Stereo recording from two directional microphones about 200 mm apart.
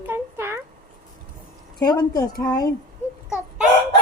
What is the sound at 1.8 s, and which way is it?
Speech, 20° left (ahead or behind).